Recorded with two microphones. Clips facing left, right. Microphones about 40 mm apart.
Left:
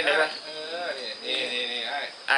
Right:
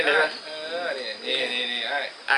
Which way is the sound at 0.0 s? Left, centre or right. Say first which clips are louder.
Right 2 dB; centre.